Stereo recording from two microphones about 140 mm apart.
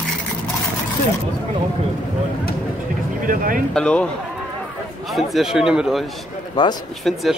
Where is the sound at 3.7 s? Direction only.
5° left (ahead or behind).